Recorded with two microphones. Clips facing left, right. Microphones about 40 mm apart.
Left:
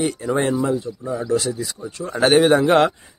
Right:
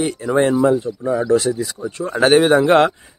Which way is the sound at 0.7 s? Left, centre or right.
Right.